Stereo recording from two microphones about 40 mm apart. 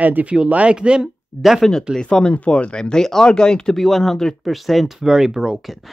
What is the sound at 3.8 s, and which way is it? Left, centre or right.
Speech, centre.